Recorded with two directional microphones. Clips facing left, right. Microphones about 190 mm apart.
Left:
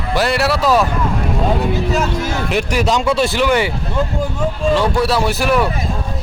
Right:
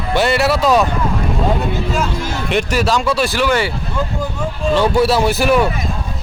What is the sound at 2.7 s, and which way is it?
Speech, 15° left (ahead or behind).